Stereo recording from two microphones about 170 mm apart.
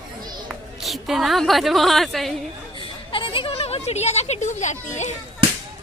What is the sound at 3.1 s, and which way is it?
Speech, 30° left (ahead or behind).